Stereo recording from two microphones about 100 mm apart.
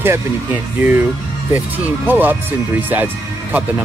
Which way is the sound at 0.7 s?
20° right (ahead or behind).